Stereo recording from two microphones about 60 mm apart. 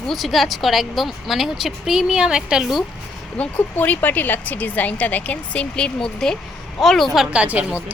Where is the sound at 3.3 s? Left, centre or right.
Left; by 6.4 s centre.